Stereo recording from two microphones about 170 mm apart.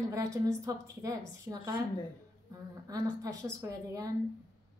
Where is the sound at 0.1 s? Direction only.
20° right (ahead or behind).